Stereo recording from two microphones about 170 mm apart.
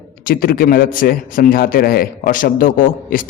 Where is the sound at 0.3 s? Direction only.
60° left (ahead or behind).